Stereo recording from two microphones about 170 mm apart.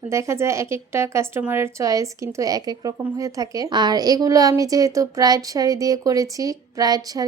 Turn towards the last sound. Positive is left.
turn(degrees=-20)  # may be behind; listen again after turning